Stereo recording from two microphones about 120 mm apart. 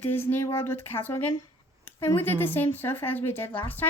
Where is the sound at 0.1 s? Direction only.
15° left (ahead or behind).